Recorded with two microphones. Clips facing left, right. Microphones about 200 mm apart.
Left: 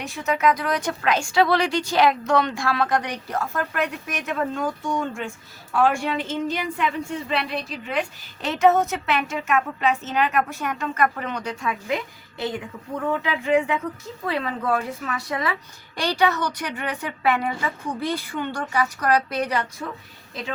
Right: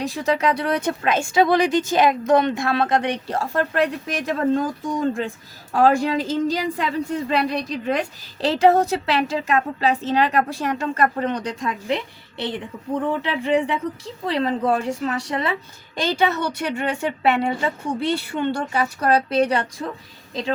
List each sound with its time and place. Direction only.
0.0 s a woman's voice: 35° right (ahead or behind)
16.0 s speech: 20° right (ahead or behind)